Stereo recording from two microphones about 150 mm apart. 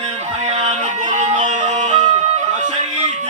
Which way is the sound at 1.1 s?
50° right (ahead or behind).